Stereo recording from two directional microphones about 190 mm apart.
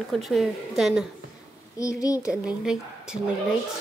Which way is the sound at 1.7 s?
15° left (ahead or behind).